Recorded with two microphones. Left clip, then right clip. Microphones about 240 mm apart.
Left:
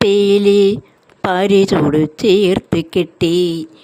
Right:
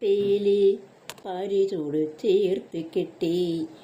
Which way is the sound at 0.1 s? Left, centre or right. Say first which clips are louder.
Left 10 dB; left.